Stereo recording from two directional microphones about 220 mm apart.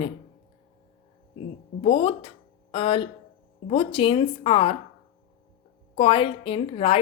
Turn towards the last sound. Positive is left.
turn(degrees=25)  # may be behind; listen again after turning